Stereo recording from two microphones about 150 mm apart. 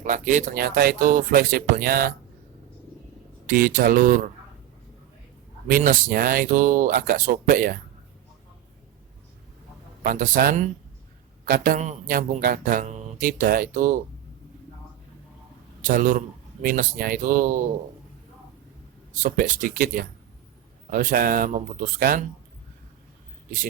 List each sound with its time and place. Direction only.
0.0 s speech: 60° right (ahead or behind); by 2.1 s 75° right (ahead or behind)
3.4 s speech: 65° right (ahead or behind)
5.6 s speech: 70° right (ahead or behind)
10.0 s a man's voice: 65° right (ahead or behind)
11.4 s a man's voice: 80° right; by 14.0 s 60° right (ahead or behind)
15.8 s a man's voice: 65° right (ahead or behind)
19.2 s a man's voice: 65° right (ahead or behind)